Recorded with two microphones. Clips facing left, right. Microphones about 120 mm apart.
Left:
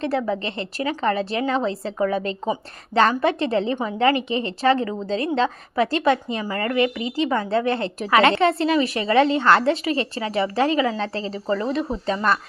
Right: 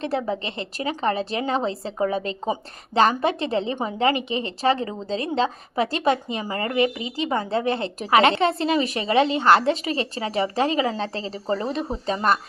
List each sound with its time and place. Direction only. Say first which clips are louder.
0.4 s a woman's voice: left 2 dB; 20° right (ahead or behind)